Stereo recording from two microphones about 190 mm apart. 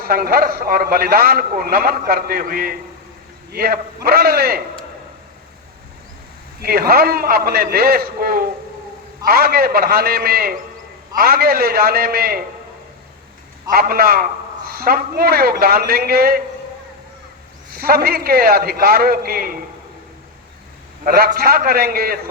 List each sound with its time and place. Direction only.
0.0 s a man's voice: 50° right (ahead or behind)
6.6 s a man's voice: 50° right (ahead or behind)
13.7 s a man's voice: 50° right (ahead or behind)
17.7 s a man's voice: 50° right (ahead or behind)
21.0 s a man's voice: 50° right (ahead or behind)